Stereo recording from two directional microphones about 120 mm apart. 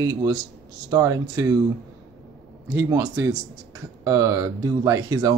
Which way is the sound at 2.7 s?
25° right (ahead or behind).